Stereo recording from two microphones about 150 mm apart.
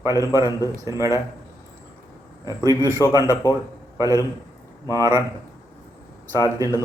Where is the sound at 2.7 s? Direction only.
20° left (ahead or behind).